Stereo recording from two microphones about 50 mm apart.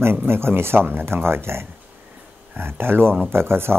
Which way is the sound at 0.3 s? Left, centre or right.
Right.